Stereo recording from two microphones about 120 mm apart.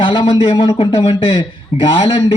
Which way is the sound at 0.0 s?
50° left (ahead or behind).